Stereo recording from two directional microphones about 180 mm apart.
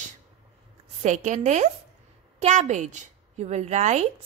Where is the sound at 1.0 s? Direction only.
40° right (ahead or behind).